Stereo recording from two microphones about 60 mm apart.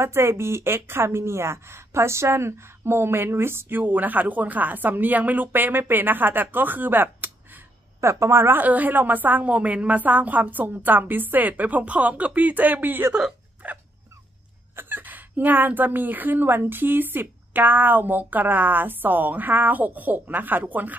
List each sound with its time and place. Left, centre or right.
0.0 s speech: right
8.0 s a woman's voice: right
13.6 s dog: right
14.8 s speech: right